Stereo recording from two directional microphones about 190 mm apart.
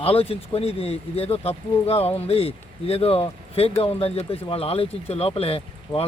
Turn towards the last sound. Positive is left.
turn(degrees=30)  # may be behind; listen again after turning